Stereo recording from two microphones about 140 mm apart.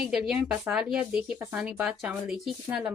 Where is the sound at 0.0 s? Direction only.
5° right (ahead or behind).